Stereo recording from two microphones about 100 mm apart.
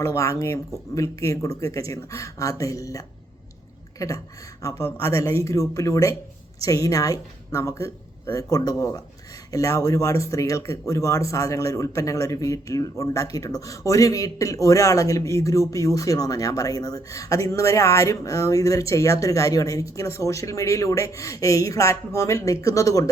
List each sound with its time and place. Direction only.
0.0 s speech: 30° left (ahead or behind)